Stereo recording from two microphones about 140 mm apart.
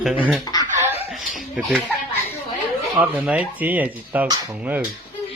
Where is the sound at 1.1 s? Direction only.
Centre (ahead or behind).